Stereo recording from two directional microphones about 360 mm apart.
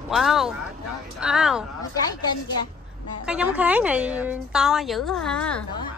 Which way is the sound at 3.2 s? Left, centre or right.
Centre.